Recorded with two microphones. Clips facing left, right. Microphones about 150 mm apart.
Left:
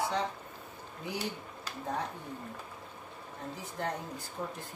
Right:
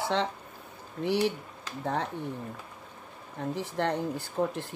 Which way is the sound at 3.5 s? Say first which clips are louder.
Right 7 dB; 75° right (ahead or behind).